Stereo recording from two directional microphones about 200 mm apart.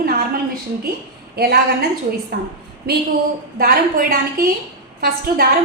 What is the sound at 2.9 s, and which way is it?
A woman's voice, 50° right (ahead or behind).